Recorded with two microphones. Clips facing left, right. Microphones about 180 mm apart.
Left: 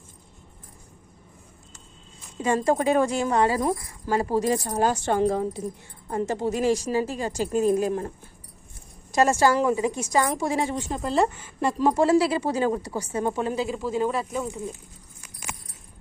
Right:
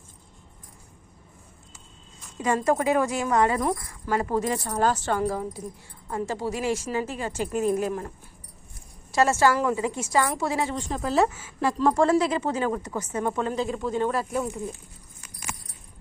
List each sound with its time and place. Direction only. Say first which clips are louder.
2.4 s speech: left 1 dB; 30° left (ahead or behind)
4.6 s a woman's voice: left 1 dB; 15° left (ahead or behind)
5.6 s speech: left 5 dB; 50° left (ahead or behind)
6.2 s speech: left 3 dB; 20° left (ahead or behind)
6.5 s speech: left 6 dB; 40° left (ahead or behind)
9.1 s a woman's voice: left 1 dB; 15° left (ahead or behind)
10.8 s speech: right 2 dB; centre (ahead or behind)
11.8 s a woman's voice: even; 10° left (ahead or behind)
12.0 s speech: left 2 dB; 30° left (ahead or behind)
13.3 s speech: even; 10° left (ahead or behind)